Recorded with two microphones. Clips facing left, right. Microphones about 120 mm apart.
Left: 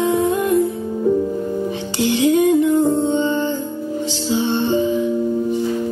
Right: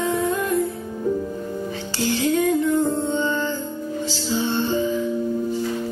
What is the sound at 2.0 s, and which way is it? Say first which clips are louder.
Music: left 5 dB; 20° left (ahead or behind).